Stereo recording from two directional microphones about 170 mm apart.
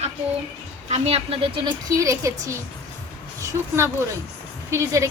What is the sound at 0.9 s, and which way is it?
Speech, 40° right (ahead or behind).